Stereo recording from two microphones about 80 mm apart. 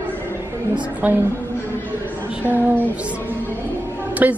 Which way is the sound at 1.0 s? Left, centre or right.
Centre.